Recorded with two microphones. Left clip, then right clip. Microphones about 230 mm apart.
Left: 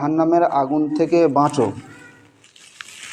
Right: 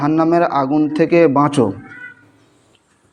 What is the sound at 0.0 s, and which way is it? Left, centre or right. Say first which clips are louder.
A man's voice: right 2 dB; right.